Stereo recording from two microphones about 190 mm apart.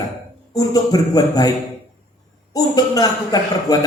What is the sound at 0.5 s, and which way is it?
A man's voice, 20° left (ahead or behind).